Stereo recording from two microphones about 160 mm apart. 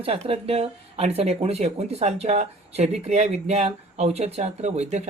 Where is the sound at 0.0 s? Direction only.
40° right (ahead or behind).